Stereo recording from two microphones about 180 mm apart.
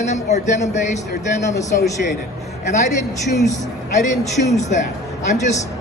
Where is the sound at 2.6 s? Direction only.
40° left (ahead or behind).